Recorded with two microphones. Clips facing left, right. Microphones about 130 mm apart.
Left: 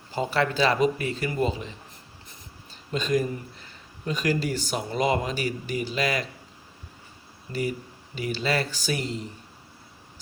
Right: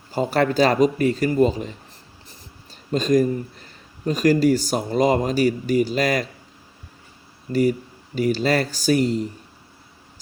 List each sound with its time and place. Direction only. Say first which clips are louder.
0.1 s speech: right 5 dB; 40° right (ahead or behind)
2.9 s speech: right 7 dB; 40° right (ahead or behind)
7.5 s speech: right 9 dB; 45° right (ahead or behind)